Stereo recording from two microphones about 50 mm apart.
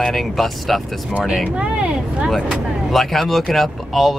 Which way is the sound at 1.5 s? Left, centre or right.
Centre.